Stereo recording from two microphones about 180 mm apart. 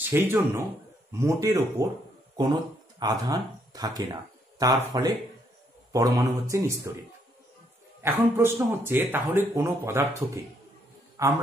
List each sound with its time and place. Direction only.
0.1 s speech: 10° right (ahead or behind)
3.0 s speech: 20° right (ahead or behind)
8.0 s a man's voice: 15° right (ahead or behind)